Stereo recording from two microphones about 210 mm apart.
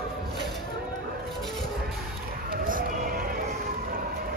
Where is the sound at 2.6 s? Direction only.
40° right (ahead or behind).